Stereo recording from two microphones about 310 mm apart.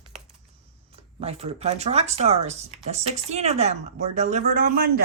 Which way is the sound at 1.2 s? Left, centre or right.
Centre.